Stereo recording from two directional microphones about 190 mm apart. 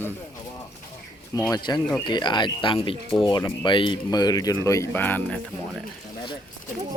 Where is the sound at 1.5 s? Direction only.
20° left (ahead or behind).